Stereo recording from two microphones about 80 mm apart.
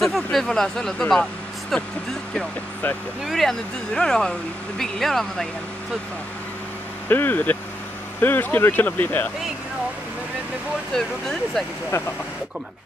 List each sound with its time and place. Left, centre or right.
0.0 s speech: centre
3.3 s speech: centre
7.1 s speech: left
11.0 s speech: centre